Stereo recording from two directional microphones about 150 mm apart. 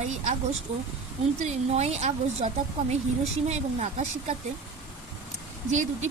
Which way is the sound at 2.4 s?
65° right (ahead or behind).